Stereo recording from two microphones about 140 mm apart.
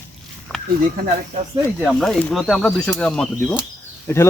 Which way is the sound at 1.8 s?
5° left (ahead or behind).